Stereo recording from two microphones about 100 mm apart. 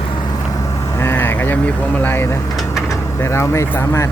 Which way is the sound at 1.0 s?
20° left (ahead or behind).